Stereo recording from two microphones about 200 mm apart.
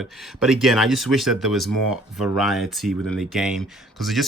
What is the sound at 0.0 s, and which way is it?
Speech, centre (ahead or behind).